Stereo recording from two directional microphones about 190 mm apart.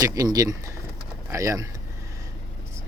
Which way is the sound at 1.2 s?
15° right (ahead or behind).